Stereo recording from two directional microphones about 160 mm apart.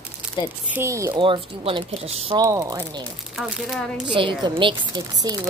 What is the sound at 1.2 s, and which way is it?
Speech, 30° right (ahead or behind).